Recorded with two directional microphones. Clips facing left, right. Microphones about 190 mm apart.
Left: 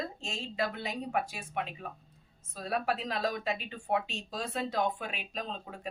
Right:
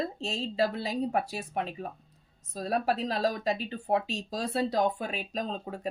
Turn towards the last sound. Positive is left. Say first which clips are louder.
# right 6 dB
turn(degrees=-40)  # may be behind; listen again after turning